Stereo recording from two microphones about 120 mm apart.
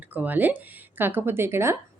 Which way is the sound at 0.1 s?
15° right (ahead or behind).